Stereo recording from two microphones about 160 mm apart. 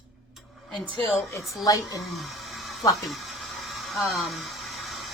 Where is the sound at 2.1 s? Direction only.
Centre (ahead or behind).